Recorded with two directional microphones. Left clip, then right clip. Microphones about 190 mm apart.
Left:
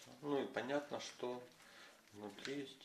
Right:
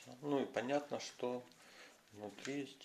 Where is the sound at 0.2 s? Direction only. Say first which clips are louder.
Right 2 dB; 35° right (ahead or behind).